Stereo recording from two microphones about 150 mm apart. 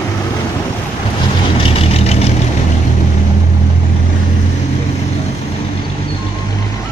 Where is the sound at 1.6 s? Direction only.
40° left (ahead or behind).